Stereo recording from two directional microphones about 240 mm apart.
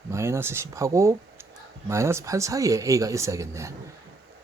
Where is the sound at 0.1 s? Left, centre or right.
Centre.